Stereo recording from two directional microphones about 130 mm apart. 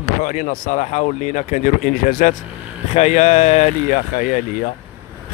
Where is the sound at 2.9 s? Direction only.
60° left (ahead or behind).